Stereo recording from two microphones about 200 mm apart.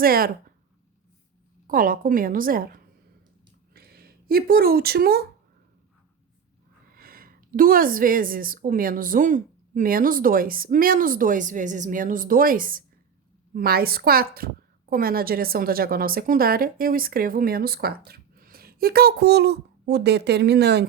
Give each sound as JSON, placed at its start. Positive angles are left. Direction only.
{"t": 0.0, "sound": "a woman's voice", "side_deg": -50}
{"t": 1.6, "sound": "a woman's voice", "side_deg": -45}
{"t": 6.9, "sound": "a woman's voice", "side_deg": -45}